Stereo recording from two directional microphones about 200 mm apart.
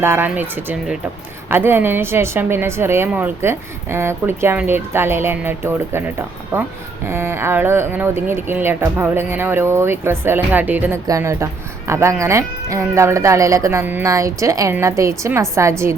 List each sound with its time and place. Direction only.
0.0 s a woman's voice: 10° right (ahead or behind)